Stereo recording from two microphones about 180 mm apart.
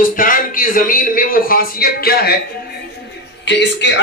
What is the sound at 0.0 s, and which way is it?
A man's voice, 50° left (ahead or behind).